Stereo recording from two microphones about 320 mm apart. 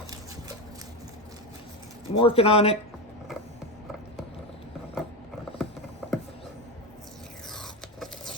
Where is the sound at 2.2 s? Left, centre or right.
Centre.